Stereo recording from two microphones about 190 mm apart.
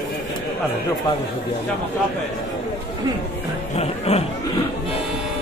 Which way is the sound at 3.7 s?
30° left (ahead or behind).